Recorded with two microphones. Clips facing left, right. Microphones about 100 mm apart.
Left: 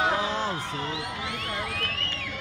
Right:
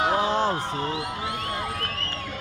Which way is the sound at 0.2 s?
40° right (ahead or behind).